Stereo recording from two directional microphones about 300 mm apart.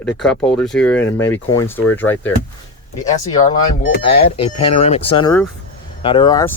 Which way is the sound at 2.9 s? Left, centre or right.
Left.